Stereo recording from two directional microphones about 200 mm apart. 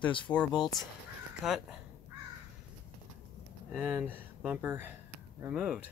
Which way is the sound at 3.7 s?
10° right (ahead or behind).